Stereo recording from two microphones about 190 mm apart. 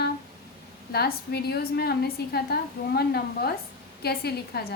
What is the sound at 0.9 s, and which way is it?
A woman's voice, 55° left (ahead or behind).